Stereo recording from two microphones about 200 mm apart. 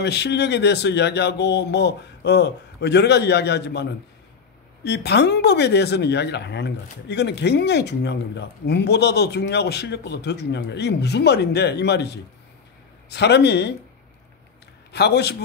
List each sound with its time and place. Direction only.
0.0 s speech: 55° left (ahead or behind)
14.9 s a man's voice: 55° left (ahead or behind)